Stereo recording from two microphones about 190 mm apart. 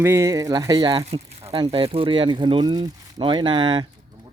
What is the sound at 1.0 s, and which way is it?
Speech, 35° right (ahead or behind).